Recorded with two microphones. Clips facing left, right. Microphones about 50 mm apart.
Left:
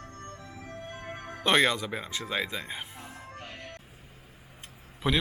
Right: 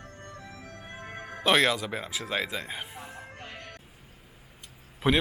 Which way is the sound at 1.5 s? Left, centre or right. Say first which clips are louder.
Left 1 dB; centre.